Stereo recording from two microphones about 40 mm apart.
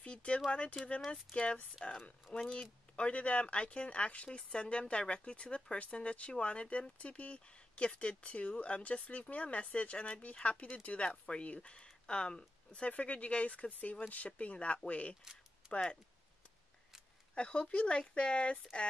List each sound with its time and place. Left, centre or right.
0.0 s a sound: left
0.5 s speech: left
1.8 s speech: left
12.9 s speech: left
17.4 s speech: left